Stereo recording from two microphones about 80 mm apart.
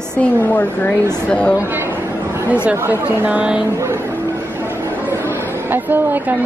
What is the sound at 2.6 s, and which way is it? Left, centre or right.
Speech, centre.